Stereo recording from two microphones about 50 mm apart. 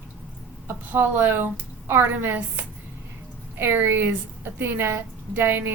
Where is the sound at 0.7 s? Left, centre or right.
Right.